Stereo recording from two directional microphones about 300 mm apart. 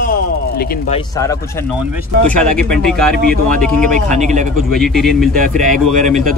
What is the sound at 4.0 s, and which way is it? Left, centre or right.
Speech, right.